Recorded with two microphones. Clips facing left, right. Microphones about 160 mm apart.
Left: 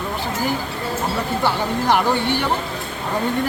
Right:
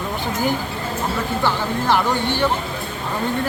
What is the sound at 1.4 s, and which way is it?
Speech, 15° left (ahead or behind).